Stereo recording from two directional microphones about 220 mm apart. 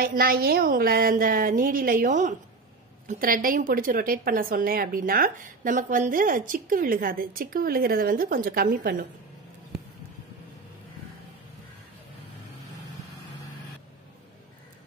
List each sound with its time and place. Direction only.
0.0 s a woman's voice: 40° right (ahead or behind)